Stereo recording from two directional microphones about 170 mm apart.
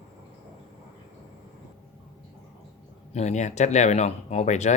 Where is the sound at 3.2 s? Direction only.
45° left (ahead or behind).